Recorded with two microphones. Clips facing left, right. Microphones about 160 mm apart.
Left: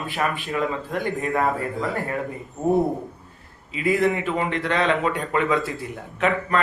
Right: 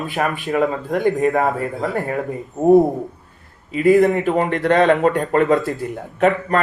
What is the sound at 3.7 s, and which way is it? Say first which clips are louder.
Speech: right 8 dB; 45° right (ahead or behind).